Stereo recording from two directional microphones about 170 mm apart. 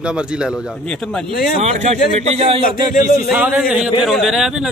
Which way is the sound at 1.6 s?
40° right (ahead or behind).